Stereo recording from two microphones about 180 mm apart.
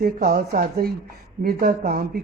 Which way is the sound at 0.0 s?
60° right (ahead or behind).